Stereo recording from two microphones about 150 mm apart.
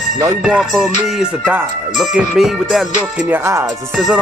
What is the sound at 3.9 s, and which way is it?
Music, centre (ahead or behind).